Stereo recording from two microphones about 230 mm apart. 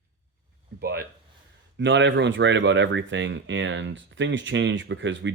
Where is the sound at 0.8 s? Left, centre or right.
Right.